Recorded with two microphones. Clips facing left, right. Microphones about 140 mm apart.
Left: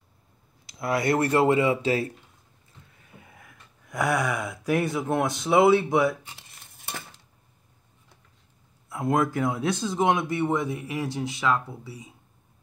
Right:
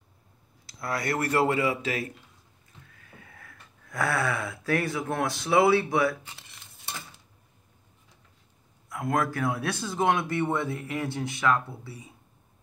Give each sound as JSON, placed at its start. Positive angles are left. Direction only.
{"t": 0.7, "sound": "speech", "side_deg": 20}
{"t": 3.2, "sound": "speech", "side_deg": 15}
{"t": 8.8, "sound": "speech", "side_deg": 25}